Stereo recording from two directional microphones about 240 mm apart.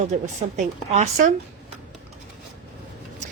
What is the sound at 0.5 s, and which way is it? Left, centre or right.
Speech, right.